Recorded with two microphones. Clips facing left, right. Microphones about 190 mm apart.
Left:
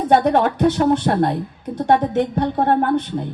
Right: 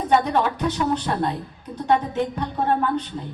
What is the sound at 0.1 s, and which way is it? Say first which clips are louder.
A woman's voice: left 5 dB; 65° left (ahead or behind).